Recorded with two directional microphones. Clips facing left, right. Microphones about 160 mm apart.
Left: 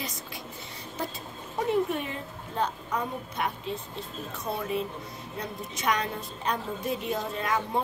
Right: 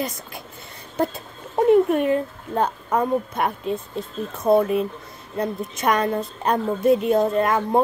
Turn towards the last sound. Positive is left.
turn(degrees=-50)  # may be behind; listen again after turning